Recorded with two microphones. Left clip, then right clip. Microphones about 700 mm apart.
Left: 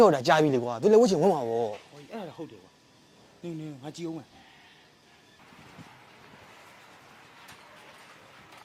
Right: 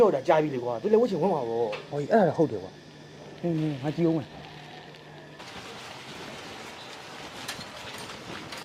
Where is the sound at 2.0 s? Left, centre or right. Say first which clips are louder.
Right 18 dB; centre.